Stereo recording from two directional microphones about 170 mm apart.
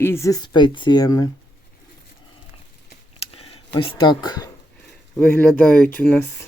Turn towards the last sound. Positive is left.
turn(degrees=10)  # may be behind; listen again after turning